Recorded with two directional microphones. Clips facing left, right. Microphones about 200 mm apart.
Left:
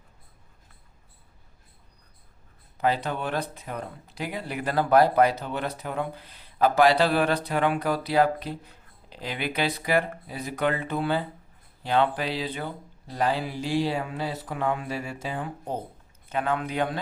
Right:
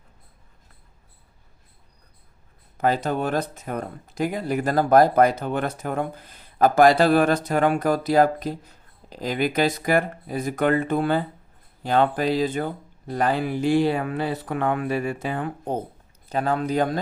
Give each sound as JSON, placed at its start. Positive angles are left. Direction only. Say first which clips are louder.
{"t": 2.7, "sound": "speech", "louder": "right 4 dB", "side_deg": -45}
{"t": 16.3, "sound": "speech", "louder": "right 5 dB", "side_deg": -35}